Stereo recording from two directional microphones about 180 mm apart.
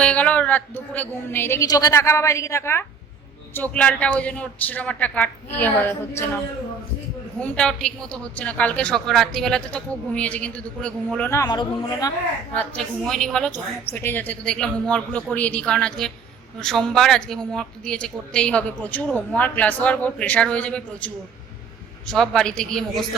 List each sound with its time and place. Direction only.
0.0 s a woman's voice: 5° left (ahead or behind); by 12.1 s 25° left (ahead or behind)
12.5 s a woman's voice: 5° left (ahead or behind)